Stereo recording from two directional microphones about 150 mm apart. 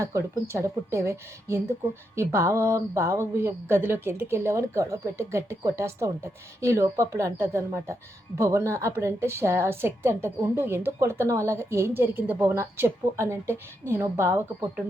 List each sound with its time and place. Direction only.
0.0 s a woman's voice: 20° right (ahead or behind)